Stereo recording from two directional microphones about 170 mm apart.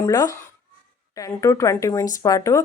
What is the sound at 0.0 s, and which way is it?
Speech, 20° left (ahead or behind).